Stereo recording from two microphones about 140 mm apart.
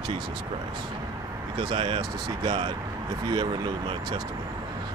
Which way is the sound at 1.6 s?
35° right (ahead or behind).